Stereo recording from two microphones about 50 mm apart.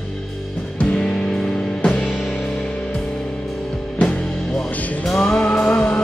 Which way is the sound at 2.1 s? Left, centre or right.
Centre.